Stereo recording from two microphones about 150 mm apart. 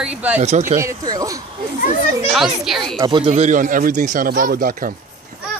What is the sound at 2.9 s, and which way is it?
Speech, 30° right (ahead or behind).